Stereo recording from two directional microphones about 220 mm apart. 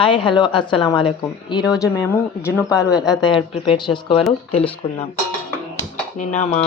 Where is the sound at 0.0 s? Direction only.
20° left (ahead or behind).